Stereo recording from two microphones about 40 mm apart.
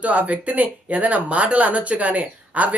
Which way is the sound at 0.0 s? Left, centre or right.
Right.